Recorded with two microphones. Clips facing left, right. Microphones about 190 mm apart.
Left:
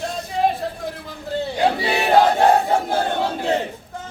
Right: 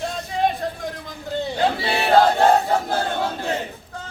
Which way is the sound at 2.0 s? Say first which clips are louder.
Even; 15° left (ahead or behind).